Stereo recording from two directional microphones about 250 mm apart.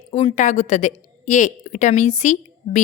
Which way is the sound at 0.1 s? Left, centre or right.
Left.